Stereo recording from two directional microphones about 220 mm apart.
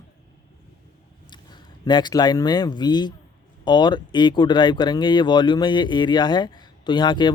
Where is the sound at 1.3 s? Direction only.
20° left (ahead or behind).